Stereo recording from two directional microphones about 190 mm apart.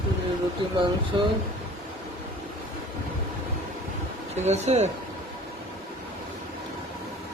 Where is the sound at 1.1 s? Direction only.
25° right (ahead or behind).